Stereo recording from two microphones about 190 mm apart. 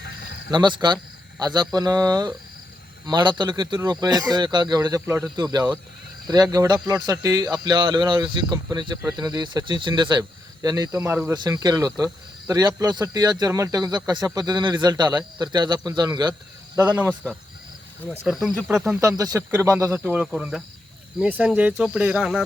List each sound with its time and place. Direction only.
0.5 s speech: 25° right (ahead or behind)
18.2 s speech: 5° right (ahead or behind)
18.9 s speech: 15° right (ahead or behind)